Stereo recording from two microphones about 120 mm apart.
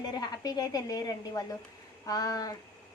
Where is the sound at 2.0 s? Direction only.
30° left (ahead or behind).